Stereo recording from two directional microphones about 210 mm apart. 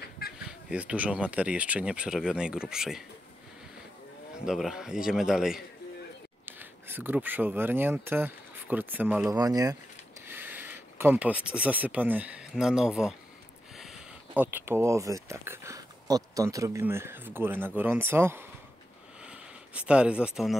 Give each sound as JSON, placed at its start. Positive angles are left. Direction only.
{"t": 0.5, "sound": "speech", "side_deg": -5}
{"t": 4.5, "sound": "speech", "side_deg": 0}
{"t": 19.2, "sound": "a sound", "side_deg": -5}